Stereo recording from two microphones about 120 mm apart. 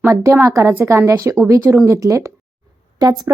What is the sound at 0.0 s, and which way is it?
A woman's voice, 25° right (ahead or behind).